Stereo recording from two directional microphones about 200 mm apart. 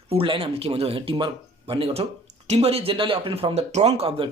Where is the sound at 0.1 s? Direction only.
30° right (ahead or behind).